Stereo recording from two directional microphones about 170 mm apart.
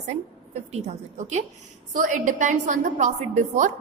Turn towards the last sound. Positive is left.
turn(degrees=-45)  # may be behind; listen again after turning